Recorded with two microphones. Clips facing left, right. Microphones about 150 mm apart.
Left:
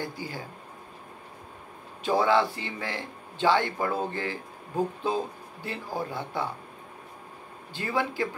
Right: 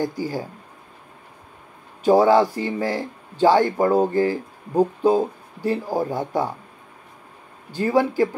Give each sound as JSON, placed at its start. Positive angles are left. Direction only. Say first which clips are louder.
{"t": 0.0, "sound": "speech", "louder": "right 10 dB", "side_deg": -40}
{"t": 2.0, "sound": "speech", "louder": "right 8 dB", "side_deg": -40}
{"t": 7.7, "sound": "speech", "louder": "right 10 dB", "side_deg": -40}